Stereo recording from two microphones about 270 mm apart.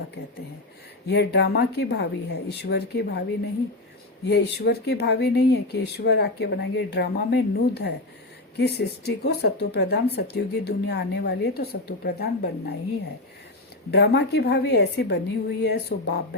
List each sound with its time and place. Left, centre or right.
1.0 s speech: left
4.3 s speech: left
13.9 s speech: left